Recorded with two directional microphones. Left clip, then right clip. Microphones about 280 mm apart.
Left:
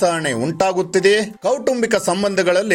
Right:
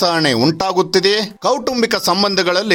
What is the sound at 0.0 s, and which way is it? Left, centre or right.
Speech, centre.